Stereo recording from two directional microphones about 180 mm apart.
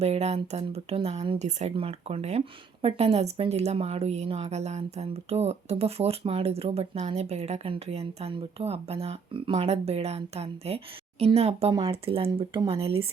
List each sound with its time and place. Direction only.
0.0 s a woman's voice: 35° right (ahead or behind)